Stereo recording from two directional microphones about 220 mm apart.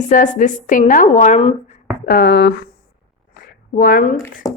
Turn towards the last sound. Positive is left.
turn(degrees=15)  # may be behind; listen again after turning